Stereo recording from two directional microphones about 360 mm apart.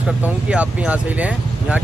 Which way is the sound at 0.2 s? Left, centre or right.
Centre.